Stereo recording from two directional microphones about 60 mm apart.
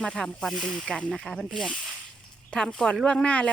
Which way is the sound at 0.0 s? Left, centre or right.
Centre.